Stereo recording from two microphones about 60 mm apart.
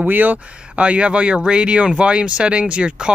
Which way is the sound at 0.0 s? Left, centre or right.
Right.